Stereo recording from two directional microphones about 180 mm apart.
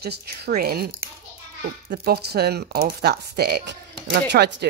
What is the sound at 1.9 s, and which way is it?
Speech, 60° right (ahead or behind).